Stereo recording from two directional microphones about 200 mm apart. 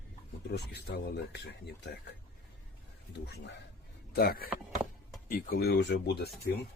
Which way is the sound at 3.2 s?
55° left (ahead or behind).